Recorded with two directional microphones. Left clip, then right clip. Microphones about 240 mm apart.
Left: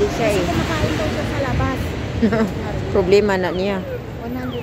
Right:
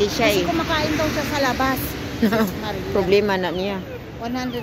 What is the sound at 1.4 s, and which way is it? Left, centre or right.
Vehicle, right.